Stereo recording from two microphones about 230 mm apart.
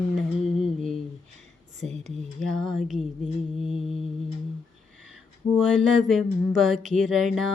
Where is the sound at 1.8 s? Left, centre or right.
Right.